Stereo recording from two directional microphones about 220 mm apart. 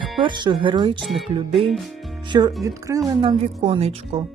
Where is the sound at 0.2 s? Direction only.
20° right (ahead or behind).